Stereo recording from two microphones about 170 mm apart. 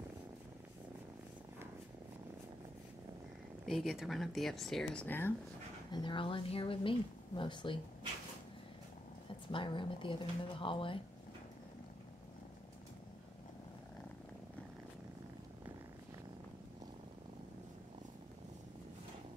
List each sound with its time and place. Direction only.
3.6 s speech: centre (ahead or behind)
5.9 s speech: 25° left (ahead or behind)
9.5 s speech: 30° left (ahead or behind)